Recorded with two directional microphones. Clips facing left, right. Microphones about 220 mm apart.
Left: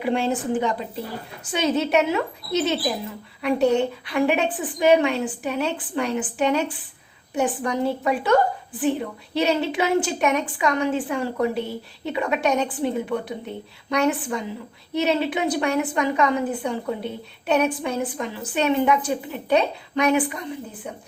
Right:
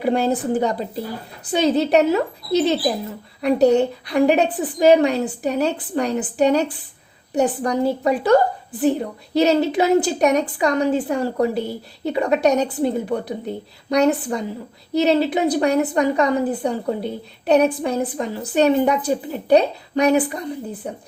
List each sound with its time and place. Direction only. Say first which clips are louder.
0.0 s a woman's voice: right 4 dB; 40° right (ahead or behind)